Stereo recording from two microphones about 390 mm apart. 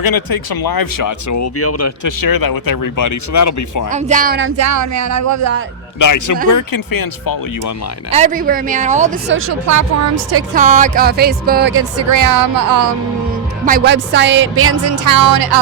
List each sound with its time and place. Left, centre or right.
0.0 s speech: left
2.0 s speech: left
3.9 s speech: centre; by 5.6 s right
6.0 s a man's voice: left
8.1 s speech: centre
9.6 s a woman's voice: right
10.5 s speech: centre; by 12.8 s right
13.7 s speech: right
15.0 s music: right